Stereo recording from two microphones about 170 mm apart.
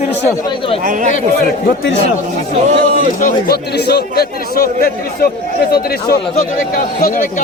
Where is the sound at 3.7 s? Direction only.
75° left (ahead or behind).